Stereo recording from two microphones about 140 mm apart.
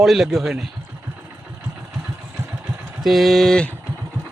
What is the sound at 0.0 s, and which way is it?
Speech, centre (ahead or behind).